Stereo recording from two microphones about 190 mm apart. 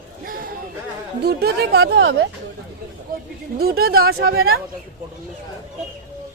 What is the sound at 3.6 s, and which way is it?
Speech, 50° right (ahead or behind).